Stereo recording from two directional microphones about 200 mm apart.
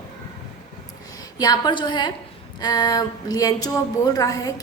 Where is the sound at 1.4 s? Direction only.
20° left (ahead or behind).